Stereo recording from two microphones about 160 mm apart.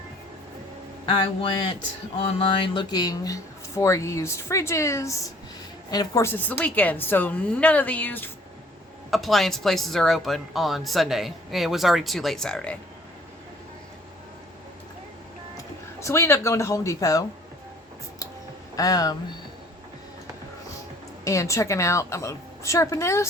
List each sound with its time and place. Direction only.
1.0 s a sound: 35° left (ahead or behind)
2.2 s a woman's voice: 30° left (ahead or behind); by 8.3 s 10° left (ahead or behind)
9.0 s a woman's voice: centre (ahead or behind)
15.5 s speech: 20° left (ahead or behind)
18.8 s speech: 25° left (ahead or behind)
21.2 s a woman's voice: 20° left (ahead or behind)